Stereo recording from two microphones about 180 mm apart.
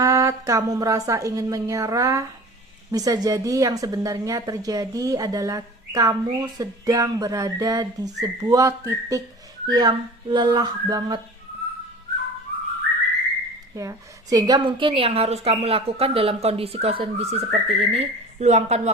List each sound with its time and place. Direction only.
0.0 s a woman's voice: 15° right (ahead or behind)
13.7 s a woman's voice: 20° right (ahead or behind); by 18.8 s 40° right (ahead or behind)